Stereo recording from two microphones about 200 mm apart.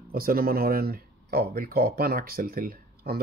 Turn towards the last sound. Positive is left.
turn(degrees=-50)  # may be behind; listen again after turning